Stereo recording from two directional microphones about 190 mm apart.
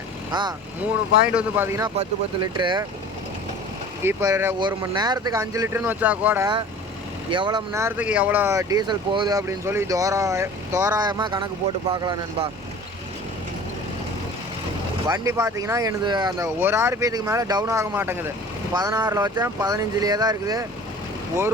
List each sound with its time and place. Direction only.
0.3 s speech: 25° right (ahead or behind)
1.3 s speech: 10° right (ahead or behind)
2.0 s speech: 25° right (ahead or behind)
4.0 s speech: 15° right (ahead or behind)
7.3 s speech: 25° right (ahead or behind)
15.0 s speech: 15° right (ahead or behind)